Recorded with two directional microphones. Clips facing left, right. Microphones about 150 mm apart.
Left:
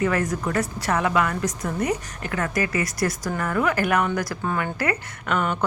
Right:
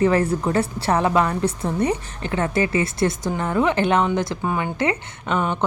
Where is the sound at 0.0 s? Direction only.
30° right (ahead or behind).